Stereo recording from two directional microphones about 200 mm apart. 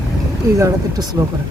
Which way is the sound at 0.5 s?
15° right (ahead or behind).